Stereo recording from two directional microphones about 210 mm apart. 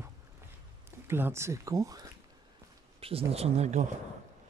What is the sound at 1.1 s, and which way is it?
Speech, 10° right (ahead or behind).